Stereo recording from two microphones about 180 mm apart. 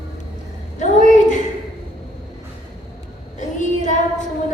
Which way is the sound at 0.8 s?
45° left (ahead or behind).